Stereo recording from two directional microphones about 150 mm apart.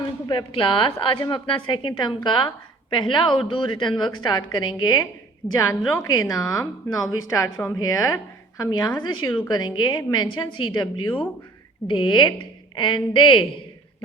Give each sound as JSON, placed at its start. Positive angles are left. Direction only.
{"t": 0.3, "sound": "a woman's voice", "side_deg": 35}